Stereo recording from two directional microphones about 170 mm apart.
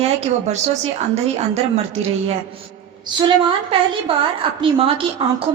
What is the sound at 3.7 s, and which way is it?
A woman's voice, 30° right (ahead or behind).